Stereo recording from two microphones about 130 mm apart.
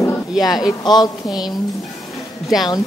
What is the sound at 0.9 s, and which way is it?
Speech, 35° left (ahead or behind).